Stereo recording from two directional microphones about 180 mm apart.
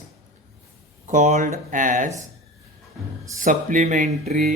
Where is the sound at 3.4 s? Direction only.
45° right (ahead or behind).